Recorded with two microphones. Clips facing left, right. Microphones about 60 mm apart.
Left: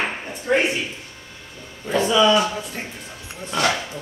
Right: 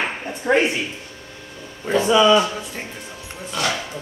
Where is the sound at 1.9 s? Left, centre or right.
Centre.